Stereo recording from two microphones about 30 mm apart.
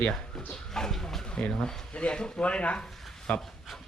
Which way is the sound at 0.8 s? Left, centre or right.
Centre.